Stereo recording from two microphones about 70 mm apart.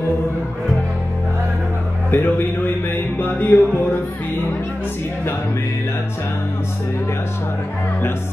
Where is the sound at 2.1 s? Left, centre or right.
Left.